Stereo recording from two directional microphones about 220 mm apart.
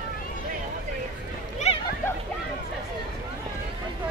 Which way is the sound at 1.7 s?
30° left (ahead or behind).